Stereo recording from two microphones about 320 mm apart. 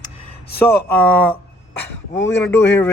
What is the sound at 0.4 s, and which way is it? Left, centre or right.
Speech, left.